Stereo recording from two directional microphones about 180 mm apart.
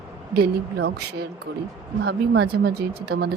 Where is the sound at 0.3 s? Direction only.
60° right (ahead or behind).